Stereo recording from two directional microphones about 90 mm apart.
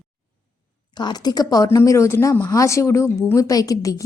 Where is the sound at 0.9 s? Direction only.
50° left (ahead or behind).